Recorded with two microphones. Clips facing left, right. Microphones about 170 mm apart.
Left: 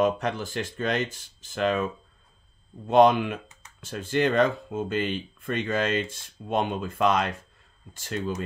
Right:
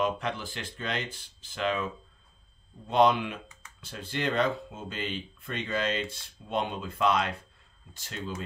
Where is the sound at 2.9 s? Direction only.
50° left (ahead or behind).